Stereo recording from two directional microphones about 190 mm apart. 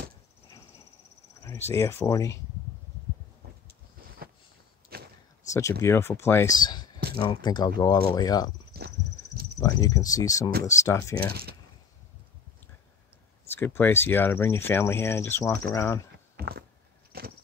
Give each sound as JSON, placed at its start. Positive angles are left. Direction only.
{"t": 1.4, "sound": "speech", "side_deg": 15}
{"t": 3.4, "sound": "vehicle", "side_deg": -55}
{"t": 4.9, "sound": "a sound", "side_deg": -55}
{"t": 5.5, "sound": "speech", "side_deg": 15}
{"t": 8.7, "sound": "a sound", "side_deg": -55}
{"t": 9.6, "sound": "speech", "side_deg": 20}
{"t": 13.6, "sound": "speech", "side_deg": 10}
{"t": 16.3, "sound": "a sound", "side_deg": -55}
{"t": 17.1, "sound": "vehicle", "side_deg": -55}